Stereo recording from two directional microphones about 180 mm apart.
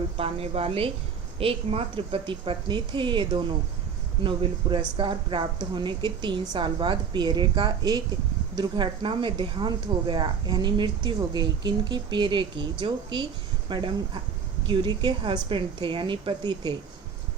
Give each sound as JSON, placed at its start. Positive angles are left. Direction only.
{"t": 0.2, "sound": "a woman's voice", "side_deg": -35}